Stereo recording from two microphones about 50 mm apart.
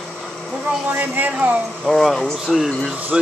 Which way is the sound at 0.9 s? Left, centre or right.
Right.